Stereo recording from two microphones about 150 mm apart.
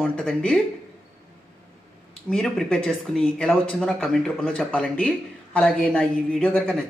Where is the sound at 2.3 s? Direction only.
5° left (ahead or behind).